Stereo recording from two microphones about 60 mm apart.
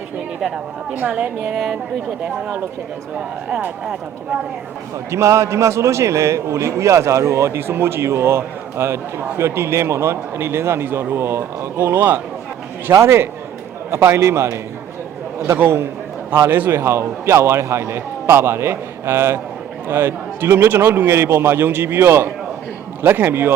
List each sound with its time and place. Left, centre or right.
1.0 s a woman's voice: centre
1.5 s speech: centre
5.1 s a man's voice: right
11.9 s a man's voice: right
12.9 s a man's voice: right